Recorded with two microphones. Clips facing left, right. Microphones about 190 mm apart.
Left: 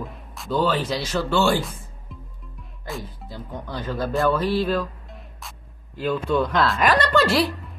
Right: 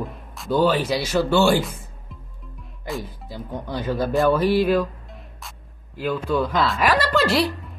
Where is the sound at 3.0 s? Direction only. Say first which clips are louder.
Right 3 dB; 15° right (ahead or behind).